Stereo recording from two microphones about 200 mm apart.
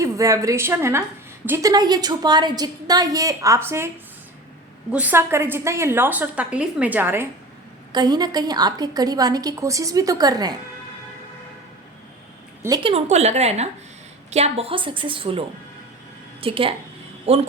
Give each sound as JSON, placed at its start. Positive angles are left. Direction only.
{"t": 0.0, "sound": "a woman's voice", "side_deg": -15}
{"t": 4.9, "sound": "a woman's voice", "side_deg": -5}
{"t": 7.9, "sound": "a woman's voice", "side_deg": -20}
{"t": 12.6, "sound": "a woman's voice", "side_deg": -20}
{"t": 12.9, "sound": "a woman's voice", "side_deg": -35}